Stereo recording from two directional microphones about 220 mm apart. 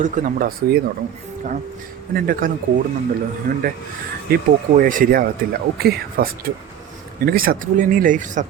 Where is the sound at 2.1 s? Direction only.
40° right (ahead or behind).